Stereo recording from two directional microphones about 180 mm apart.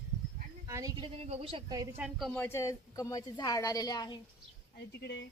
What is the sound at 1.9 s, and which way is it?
Speech, 5° right (ahead or behind).